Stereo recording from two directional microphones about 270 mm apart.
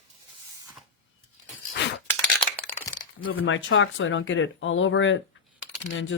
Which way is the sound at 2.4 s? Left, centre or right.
Centre.